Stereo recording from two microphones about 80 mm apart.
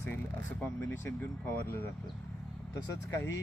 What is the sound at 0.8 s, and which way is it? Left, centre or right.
Speech, left.